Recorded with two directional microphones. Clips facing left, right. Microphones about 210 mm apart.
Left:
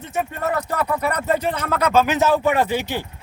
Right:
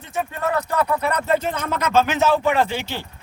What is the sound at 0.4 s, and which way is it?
Speech, 40° left (ahead or behind).